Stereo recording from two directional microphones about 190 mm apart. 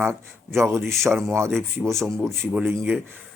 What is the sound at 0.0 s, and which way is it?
Speech, 15° right (ahead or behind).